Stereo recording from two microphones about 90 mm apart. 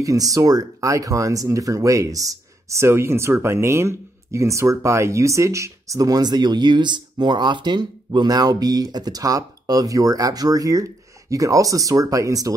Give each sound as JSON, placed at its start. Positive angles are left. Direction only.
{"t": 0.0, "sound": "speech", "side_deg": -40}